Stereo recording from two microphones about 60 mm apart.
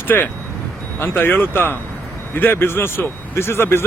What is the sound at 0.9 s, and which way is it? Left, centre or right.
Speech, left.